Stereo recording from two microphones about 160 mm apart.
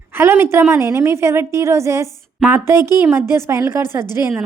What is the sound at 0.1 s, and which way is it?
A woman's voice, 15° right (ahead or behind).